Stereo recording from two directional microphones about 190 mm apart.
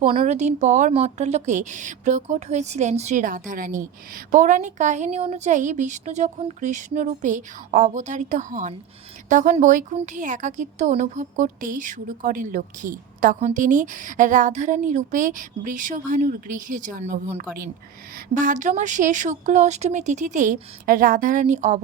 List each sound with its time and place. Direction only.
0.0 s speech: 35° right (ahead or behind)
18.3 s speech: 45° right (ahead or behind)